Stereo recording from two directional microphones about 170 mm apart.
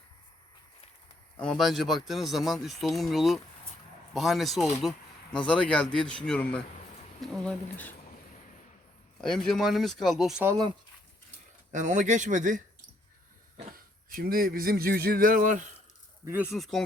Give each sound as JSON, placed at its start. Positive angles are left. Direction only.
{"t": 1.4, "sound": "speech", "side_deg": 5}
{"t": 9.2, "sound": "speech", "side_deg": 5}
{"t": 10.4, "sound": "speech", "side_deg": -20}
{"t": 11.7, "sound": "speech", "side_deg": -45}
{"t": 14.1, "sound": "speech", "side_deg": -55}
{"t": 16.2, "sound": "speech", "side_deg": -15}
{"t": 16.6, "sound": "speech", "side_deg": 0}